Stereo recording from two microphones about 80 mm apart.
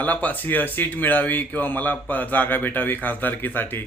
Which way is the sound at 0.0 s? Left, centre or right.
Centre.